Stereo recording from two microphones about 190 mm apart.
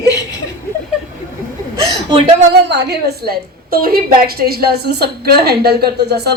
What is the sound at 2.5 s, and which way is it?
A woman's voice, 65° right (ahead or behind).